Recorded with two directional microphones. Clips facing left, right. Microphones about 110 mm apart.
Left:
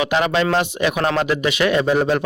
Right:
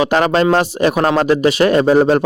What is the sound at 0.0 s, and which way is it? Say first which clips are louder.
Speech: right 5 dB; 40° right (ahead or behind).